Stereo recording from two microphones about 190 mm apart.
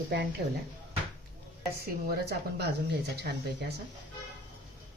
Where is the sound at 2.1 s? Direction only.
55° right (ahead or behind).